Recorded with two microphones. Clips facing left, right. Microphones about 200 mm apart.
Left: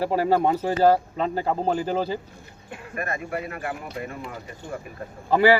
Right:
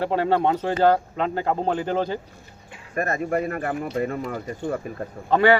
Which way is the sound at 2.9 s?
40° right (ahead or behind).